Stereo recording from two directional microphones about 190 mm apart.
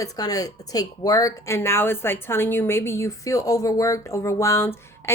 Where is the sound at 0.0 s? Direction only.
20° left (ahead or behind).